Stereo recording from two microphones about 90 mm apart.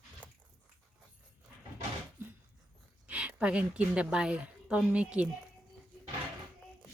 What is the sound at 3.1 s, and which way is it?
A woman's voice, 15° right (ahead or behind).